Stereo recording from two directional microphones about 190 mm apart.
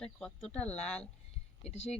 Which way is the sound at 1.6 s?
35° left (ahead or behind).